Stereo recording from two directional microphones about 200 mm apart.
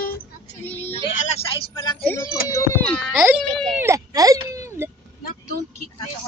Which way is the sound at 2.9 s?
5° left (ahead or behind).